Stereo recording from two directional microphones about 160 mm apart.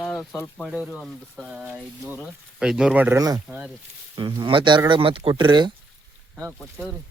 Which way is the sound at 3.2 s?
25° right (ahead or behind).